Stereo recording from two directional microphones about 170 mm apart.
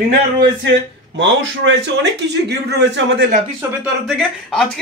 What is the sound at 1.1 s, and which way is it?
A man's voice, 90° right.